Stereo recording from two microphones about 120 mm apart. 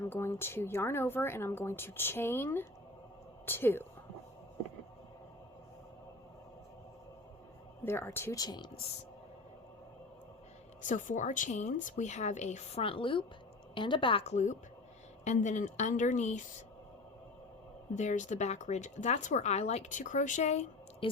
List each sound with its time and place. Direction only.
0.0 s a woman's voice: 20° left (ahead or behind)
7.9 s a woman's voice: 20° left (ahead or behind); by 8.7 s 35° left (ahead or behind)
10.8 s speech: 90° left; by 12.8 s 70° left (ahead or behind)
12.8 s a woman's voice: 45° left (ahead or behind)
14.3 s speech: 90° left
15.2 s speech: 80° left
17.9 s speech: 90° left; by 20.7 s 70° left (ahead or behind)
21.0 s speech: 45° left (ahead or behind)